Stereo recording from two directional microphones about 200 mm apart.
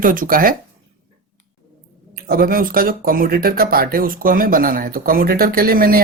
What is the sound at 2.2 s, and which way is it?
Speech, 50° right (ahead or behind).